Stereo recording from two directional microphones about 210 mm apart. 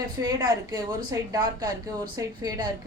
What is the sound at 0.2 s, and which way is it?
A woman's voice, 20° right (ahead or behind).